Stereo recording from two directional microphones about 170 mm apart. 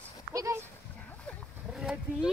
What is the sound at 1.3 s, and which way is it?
Roaring cats, 5° left (ahead or behind).